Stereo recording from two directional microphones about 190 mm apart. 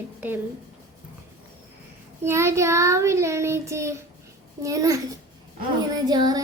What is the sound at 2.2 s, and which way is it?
Child singing, 15° right (ahead or behind).